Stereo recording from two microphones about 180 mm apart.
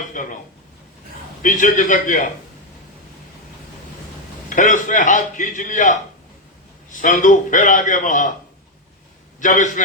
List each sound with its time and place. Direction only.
0.1 s speech: 45° left (ahead or behind)
1.4 s a man's voice: 45° left (ahead or behind)
4.4 s a man's voice: 45° left (ahead or behind)
9.4 s a man's voice: 45° left (ahead or behind)